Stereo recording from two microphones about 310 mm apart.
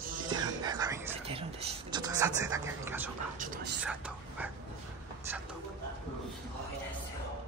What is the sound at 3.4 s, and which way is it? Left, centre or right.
Whispering, right.